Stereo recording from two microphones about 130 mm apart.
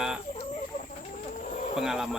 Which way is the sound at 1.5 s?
70° left (ahead or behind).